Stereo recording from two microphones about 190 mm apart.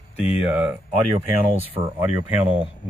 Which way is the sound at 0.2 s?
10° right (ahead or behind).